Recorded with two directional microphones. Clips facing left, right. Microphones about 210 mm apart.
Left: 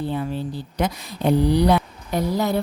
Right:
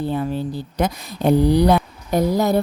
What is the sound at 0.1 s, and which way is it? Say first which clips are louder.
Speech: right 3 dB; 45° right (ahead or behind).